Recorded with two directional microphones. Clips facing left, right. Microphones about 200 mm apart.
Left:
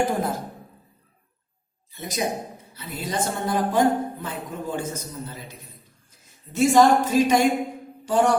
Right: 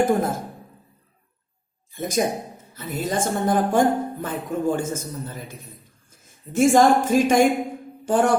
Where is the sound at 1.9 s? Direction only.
50° right (ahead or behind).